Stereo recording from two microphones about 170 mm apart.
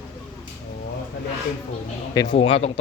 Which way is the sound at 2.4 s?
35° left (ahead or behind).